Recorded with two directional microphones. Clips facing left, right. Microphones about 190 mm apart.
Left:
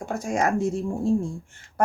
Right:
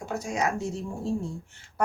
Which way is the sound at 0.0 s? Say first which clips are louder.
Left 4 dB; 55° left (ahead or behind).